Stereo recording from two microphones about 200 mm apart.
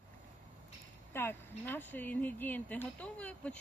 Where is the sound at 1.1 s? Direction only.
10° left (ahead or behind).